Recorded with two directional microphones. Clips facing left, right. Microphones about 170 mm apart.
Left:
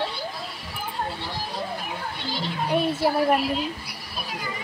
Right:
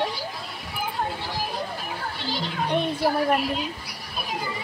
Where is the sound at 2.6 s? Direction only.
5° left (ahead or behind).